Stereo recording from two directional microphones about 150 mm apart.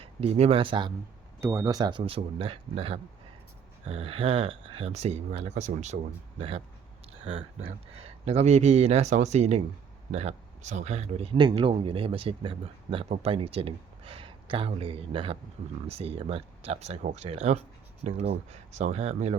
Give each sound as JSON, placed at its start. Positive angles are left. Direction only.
{"t": 0.0, "sound": "speech", "side_deg": -40}
{"t": 1.4, "sound": "speech", "side_deg": -20}
{"t": 7.9, "sound": "speech", "side_deg": -45}